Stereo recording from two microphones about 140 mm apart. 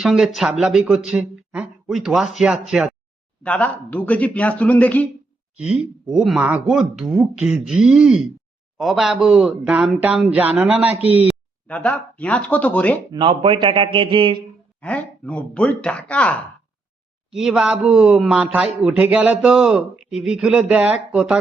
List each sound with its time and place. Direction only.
0.0 s speech: 5° right (ahead or behind)
3.4 s speech: 10° left (ahead or behind)
5.5 s speech: 5° right (ahead or behind)
11.7 s speech: 10° left (ahead or behind)
13.1 s speech: 35° right (ahead or behind)
14.8 s speech: 10° left (ahead or behind)
17.3 s speech: 5° right (ahead or behind)